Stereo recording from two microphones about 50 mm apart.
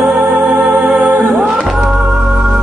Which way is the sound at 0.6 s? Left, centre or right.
Centre.